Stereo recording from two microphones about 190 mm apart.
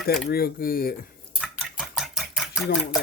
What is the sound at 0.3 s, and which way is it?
Speech, 55° left (ahead or behind).